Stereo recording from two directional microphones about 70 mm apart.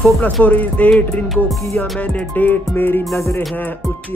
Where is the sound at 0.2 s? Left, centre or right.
Left.